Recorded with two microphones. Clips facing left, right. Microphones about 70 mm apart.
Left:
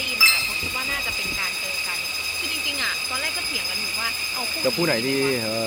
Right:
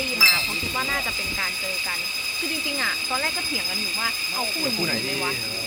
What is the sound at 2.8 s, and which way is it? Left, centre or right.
Speech, centre.